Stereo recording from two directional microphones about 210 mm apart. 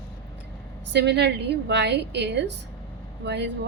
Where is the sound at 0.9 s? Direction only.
55° right (ahead or behind).